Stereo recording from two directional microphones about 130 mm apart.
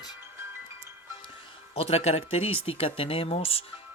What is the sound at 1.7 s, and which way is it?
Speech, 50° left (ahead or behind).